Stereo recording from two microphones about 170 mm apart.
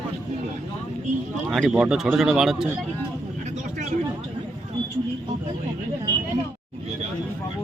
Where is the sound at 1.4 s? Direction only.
Centre (ahead or behind).